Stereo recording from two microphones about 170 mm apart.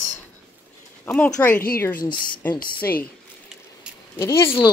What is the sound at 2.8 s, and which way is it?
Speech, 60° left (ahead or behind).